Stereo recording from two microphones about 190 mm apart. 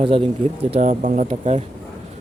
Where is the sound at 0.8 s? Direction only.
45° right (ahead or behind).